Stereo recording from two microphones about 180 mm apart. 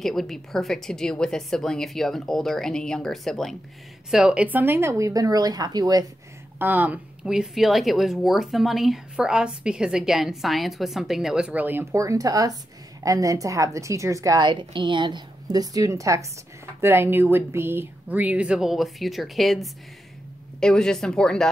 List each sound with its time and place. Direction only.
0.0 s speech: centre (ahead or behind); by 6.0 s 20° right (ahead or behind)
6.6 s a woman's voice: 10° right (ahead or behind)